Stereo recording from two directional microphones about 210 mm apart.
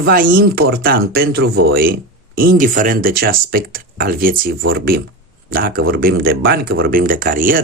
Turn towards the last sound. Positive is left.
turn(degrees=-40)  # may be behind; listen again after turning